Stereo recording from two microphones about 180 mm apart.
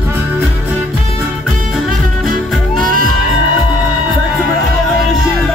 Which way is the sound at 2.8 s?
50° right (ahead or behind).